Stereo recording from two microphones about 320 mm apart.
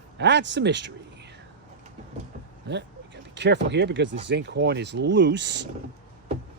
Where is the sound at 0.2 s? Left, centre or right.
Right.